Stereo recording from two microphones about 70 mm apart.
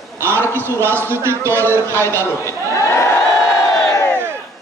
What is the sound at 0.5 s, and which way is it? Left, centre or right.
A man's voice, right.